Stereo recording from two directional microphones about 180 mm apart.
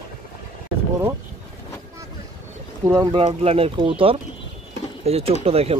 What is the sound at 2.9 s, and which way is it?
Speech, 15° right (ahead or behind).